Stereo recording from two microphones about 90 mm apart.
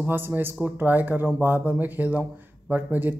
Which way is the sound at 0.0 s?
25° right (ahead or behind).